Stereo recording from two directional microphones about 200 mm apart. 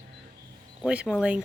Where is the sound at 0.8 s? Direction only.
5° right (ahead or behind).